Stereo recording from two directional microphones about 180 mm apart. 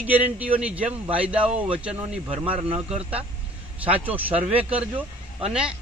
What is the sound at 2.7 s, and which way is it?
Speech, 35° right (ahead or behind).